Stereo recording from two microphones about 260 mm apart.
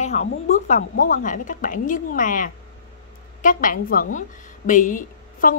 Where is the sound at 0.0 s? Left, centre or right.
Left.